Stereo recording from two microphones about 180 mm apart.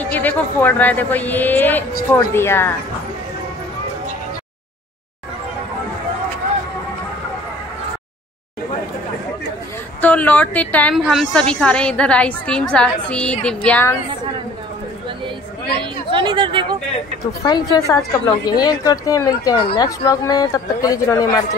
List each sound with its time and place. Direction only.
0.0 s a woman's voice: 10° left (ahead or behind)
10.0 s a woman's voice: 10° left (ahead or behind)
15.8 s speech: 25° right (ahead or behind)
17.5 s speech: 20° left (ahead or behind)
19.7 s speech: 30° left (ahead or behind)
20.1 s speech: 20° left (ahead or behind)